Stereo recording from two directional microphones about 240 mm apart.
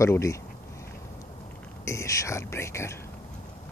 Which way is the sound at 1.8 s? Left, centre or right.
Centre.